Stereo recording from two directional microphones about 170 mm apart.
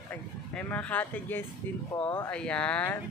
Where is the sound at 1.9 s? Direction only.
20° left (ahead or behind).